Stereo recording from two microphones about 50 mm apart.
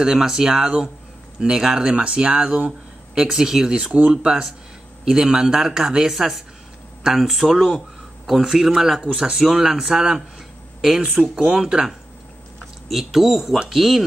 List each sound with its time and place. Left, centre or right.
0.0 s speech: centre
3.2 s speech: centre
12.8 s speech: centre